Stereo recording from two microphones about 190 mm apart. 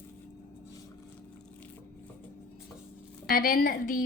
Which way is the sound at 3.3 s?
50° left (ahead or behind).